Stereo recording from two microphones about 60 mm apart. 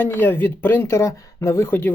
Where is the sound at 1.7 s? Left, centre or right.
Left.